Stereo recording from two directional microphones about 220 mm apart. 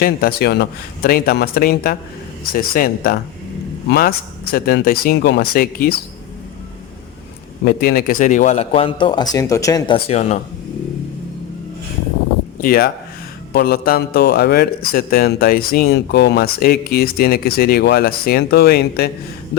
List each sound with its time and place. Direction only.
0.0 s a man's voice: 45° left (ahead or behind)
7.6 s speech: 45° left (ahead or behind)
12.6 s a man's voice: 45° left (ahead or behind)